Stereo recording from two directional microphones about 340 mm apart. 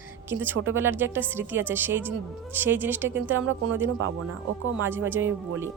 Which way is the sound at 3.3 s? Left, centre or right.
Right.